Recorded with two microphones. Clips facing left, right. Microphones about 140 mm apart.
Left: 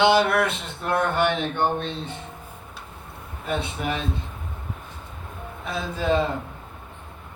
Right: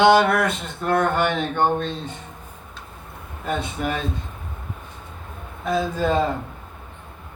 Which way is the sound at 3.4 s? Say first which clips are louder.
Right 2 dB; 45° right (ahead or behind).